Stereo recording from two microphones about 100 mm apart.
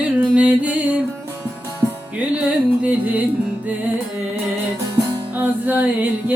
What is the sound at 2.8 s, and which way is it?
Music, 15° right (ahead or behind).